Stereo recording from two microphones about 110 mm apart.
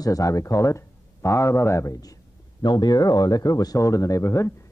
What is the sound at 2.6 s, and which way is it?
Speech, 40° left (ahead or behind).